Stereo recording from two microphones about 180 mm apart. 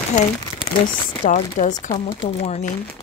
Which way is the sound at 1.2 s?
45° left (ahead or behind).